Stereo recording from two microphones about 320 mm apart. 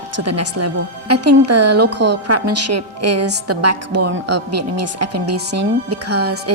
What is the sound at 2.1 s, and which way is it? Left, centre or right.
A woman's voice, right.